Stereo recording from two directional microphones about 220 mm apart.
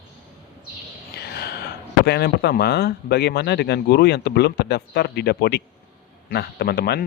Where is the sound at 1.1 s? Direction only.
45° left (ahead or behind).